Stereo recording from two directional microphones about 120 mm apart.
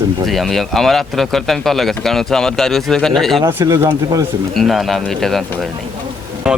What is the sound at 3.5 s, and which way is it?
Speech, 25° right (ahead or behind).